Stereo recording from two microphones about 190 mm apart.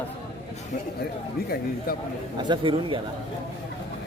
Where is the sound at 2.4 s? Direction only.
25° right (ahead or behind).